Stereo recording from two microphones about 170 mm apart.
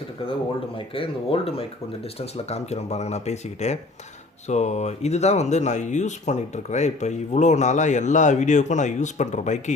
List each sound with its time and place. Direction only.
0.8 s speech: 35° left (ahead or behind)